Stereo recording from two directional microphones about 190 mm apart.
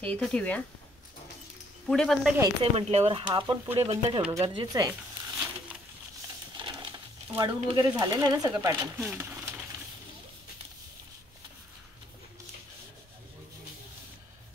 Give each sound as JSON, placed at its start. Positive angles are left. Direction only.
{"t": 0.0, "sound": "speech", "side_deg": 5}
{"t": 1.9, "sound": "speech", "side_deg": 0}
{"t": 2.6, "sound": "speech", "side_deg": -30}
{"t": 4.3, "sound": "speech", "side_deg": -20}
{"t": 6.5, "sound": "a sound", "side_deg": -25}
{"t": 7.3, "sound": "speech", "side_deg": -20}